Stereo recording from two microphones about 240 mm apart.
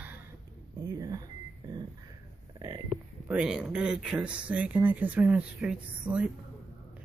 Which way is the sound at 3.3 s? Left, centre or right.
Centre.